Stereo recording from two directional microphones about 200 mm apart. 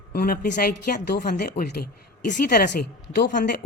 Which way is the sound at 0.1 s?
50° left (ahead or behind).